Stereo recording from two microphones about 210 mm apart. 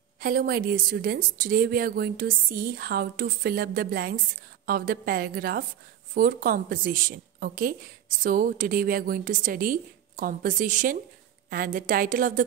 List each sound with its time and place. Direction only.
0.2 s a woman's voice: 45° right (ahead or behind)